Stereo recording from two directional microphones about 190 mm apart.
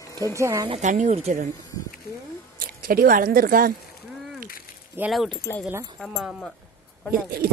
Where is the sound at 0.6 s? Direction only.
35° right (ahead or behind).